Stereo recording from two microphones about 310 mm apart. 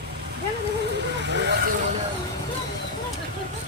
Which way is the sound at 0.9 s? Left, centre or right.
Right.